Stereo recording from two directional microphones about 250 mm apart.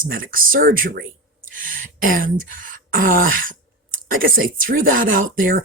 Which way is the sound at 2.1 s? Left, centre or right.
Right.